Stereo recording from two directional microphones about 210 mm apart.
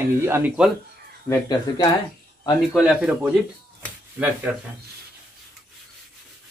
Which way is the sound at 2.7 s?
5° right (ahead or behind).